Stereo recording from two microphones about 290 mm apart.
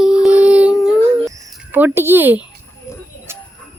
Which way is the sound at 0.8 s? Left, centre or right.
Centre.